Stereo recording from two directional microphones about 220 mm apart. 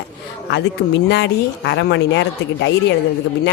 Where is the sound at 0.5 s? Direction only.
50° left (ahead or behind).